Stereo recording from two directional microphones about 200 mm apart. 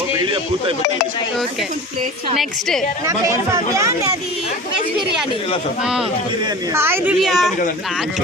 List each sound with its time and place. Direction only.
2.4 s a woman's voice: centre (ahead or behind)
3.1 s speech: 15° right (ahead or behind)
6.7 s speech: 10° right (ahead or behind)